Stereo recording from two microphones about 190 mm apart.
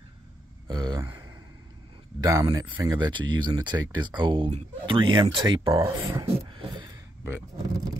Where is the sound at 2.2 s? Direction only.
20° right (ahead or behind).